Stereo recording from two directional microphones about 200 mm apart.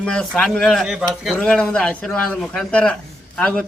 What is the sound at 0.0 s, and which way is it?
A man's voice, 5° left (ahead or behind).